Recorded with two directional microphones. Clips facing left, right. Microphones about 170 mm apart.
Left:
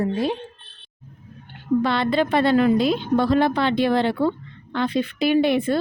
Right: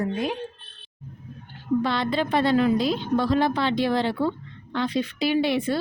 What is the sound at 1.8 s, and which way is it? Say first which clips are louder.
A woman's voice: left 4 dB; 65° left (ahead or behind).